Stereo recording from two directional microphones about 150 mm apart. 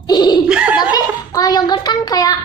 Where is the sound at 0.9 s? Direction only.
25° left (ahead or behind).